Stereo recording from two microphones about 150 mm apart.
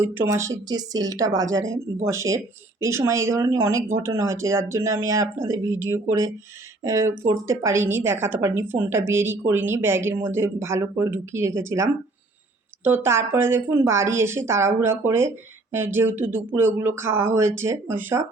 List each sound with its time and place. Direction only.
0.0 s speech: 15° right (ahead or behind)
2.8 s a woman's voice: 20° right (ahead or behind)